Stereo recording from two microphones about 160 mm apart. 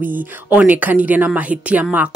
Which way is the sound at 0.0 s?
10° right (ahead or behind).